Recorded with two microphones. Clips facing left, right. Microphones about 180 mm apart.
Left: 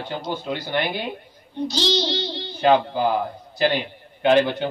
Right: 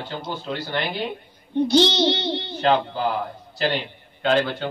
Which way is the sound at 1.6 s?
60° right (ahead or behind).